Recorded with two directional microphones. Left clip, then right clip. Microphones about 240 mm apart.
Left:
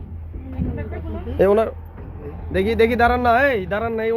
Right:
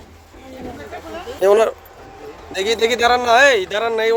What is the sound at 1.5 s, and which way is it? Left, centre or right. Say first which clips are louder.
Speech: right 6 dB; right.